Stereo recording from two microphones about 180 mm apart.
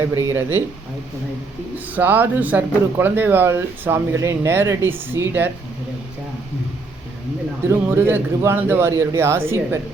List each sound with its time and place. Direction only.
0.1 s speech: 15° right (ahead or behind)
1.7 s speech: 10° right (ahead or behind)
7.7 s speech: 15° right (ahead or behind)